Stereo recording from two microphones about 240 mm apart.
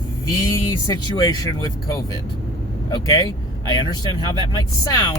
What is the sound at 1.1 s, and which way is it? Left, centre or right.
Speech, centre.